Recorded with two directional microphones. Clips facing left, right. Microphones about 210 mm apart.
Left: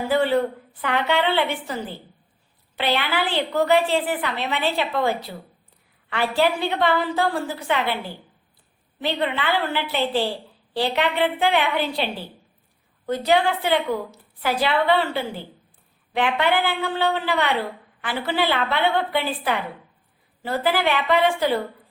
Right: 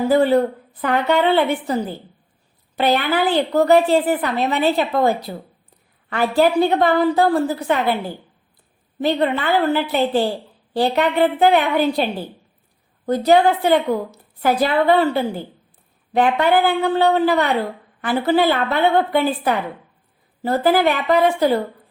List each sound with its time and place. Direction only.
0.1 s a woman's voice: 40° right (ahead or behind)